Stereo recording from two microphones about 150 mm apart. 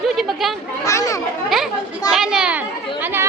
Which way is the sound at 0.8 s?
20° left (ahead or behind).